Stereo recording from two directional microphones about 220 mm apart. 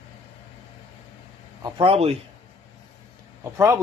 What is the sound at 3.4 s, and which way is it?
Speech, 10° right (ahead or behind).